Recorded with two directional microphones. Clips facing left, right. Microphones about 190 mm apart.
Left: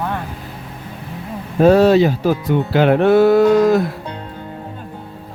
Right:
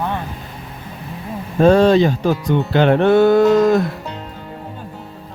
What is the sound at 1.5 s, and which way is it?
Speech, 5° left (ahead or behind).